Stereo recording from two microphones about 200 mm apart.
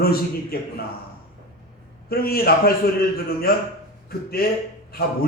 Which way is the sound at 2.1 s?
50° left (ahead or behind).